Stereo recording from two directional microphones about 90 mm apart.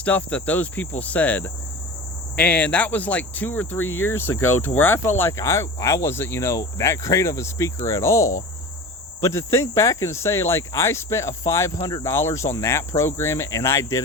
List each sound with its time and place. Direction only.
0.0 s cricket: 20° left (ahead or behind)
2.3 s speech: 15° left (ahead or behind); by 11.7 s 30° left (ahead or behind)
11.8 s speech: 50° left (ahead or behind)
12.0 s speech: 30° left (ahead or behind)